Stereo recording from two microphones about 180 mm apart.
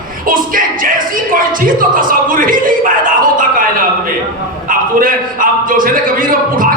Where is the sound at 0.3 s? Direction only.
50° right (ahead or behind).